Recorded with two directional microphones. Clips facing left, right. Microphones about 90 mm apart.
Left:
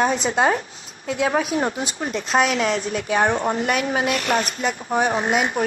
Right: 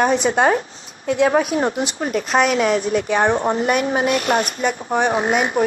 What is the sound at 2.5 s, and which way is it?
Speech, 40° right (ahead or behind).